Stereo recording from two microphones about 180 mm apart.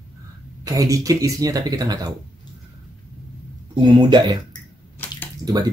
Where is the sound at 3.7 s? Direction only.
25° right (ahead or behind).